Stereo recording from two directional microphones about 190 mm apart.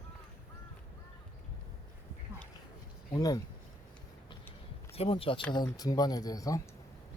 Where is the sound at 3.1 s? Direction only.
20° left (ahead or behind).